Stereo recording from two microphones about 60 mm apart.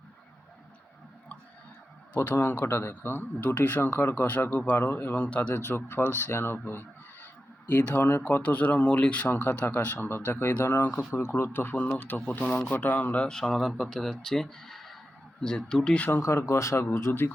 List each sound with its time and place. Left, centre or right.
2.3 s speech: left
4.3 s speech: left
5.1 s speech: left
5.5 s speech: left
7.7 s speech: left
8.4 s speech: left
9.3 s speech: left
11.9 s speech: left
13.2 s speech: centre
16.2 s speech: left
17.1 s speech: left